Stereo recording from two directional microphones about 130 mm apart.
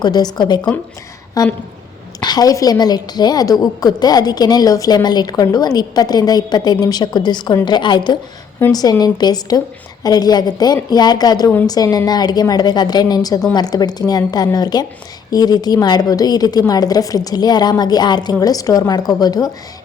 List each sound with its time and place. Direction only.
0.0 s a woman's voice: 30° left (ahead or behind)